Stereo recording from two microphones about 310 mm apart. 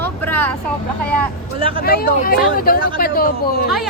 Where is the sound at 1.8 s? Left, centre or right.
Left.